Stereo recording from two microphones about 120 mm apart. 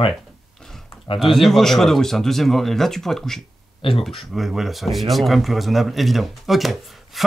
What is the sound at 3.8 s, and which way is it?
Speech, 50° left (ahead or behind).